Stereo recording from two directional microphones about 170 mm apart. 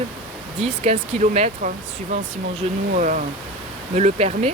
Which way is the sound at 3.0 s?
50° right (ahead or behind).